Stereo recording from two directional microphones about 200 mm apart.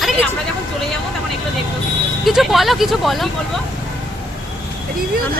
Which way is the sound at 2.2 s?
Centre (ahead or behind).